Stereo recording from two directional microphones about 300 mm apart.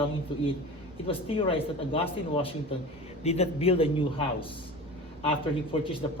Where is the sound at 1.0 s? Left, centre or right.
Centre.